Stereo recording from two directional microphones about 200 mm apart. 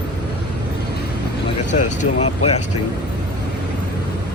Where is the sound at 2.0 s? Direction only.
30° left (ahead or behind).